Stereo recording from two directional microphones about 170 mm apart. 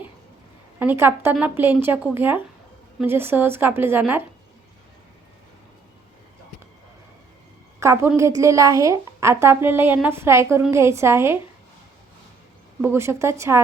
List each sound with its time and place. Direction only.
0.8 s a woman's voice: 10° right (ahead or behind)
7.8 s a woman's voice: 15° right (ahead or behind)
12.8 s a woman's voice: 15° right (ahead or behind)